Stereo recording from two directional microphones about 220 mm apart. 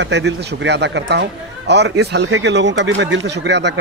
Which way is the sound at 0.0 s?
50° right (ahead or behind).